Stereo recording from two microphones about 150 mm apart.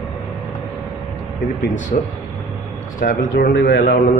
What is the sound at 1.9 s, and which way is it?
Speech, 55° left (ahead or behind).